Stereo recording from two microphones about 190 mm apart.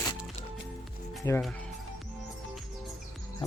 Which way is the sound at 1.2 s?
15° left (ahead or behind).